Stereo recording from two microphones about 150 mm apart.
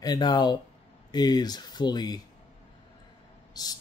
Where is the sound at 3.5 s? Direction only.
25° left (ahead or behind).